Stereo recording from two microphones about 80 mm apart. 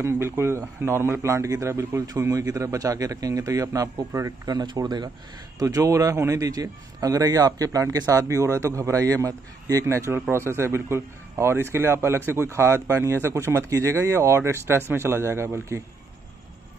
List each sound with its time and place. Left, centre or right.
0.0 s a man's voice: right
4.7 s speech: right
5.6 s a man's voice: right